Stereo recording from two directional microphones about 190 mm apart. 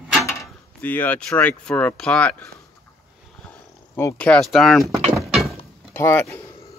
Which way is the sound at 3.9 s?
10° left (ahead or behind).